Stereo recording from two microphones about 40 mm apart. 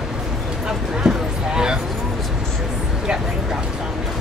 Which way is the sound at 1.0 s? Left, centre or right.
Centre.